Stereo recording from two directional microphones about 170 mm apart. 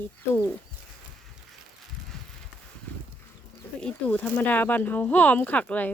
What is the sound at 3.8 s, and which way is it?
Speech, 5° left (ahead or behind).